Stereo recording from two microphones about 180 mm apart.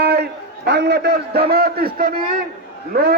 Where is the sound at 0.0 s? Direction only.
65° right (ahead or behind).